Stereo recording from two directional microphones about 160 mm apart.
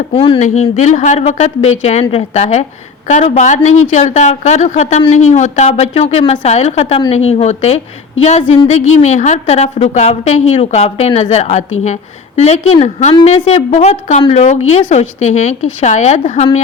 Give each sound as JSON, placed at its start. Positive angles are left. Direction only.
{"t": 0.1, "sound": "a woman's voice", "side_deg": 35}
{"t": 0.3, "sound": "a woman's voice", "side_deg": 50}